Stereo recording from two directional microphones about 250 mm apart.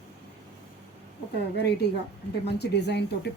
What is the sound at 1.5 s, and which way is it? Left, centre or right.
A woman's voice, left.